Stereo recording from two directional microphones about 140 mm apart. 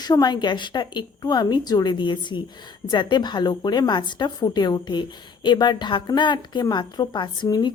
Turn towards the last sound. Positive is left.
turn(degrees=30)  # may be behind; listen again after turning